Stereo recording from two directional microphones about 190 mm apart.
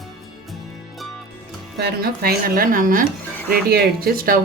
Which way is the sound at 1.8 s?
55° right (ahead or behind).